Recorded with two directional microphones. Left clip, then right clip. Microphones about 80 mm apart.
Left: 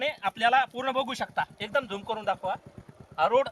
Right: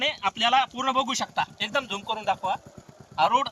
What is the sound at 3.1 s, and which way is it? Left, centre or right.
Speech, left.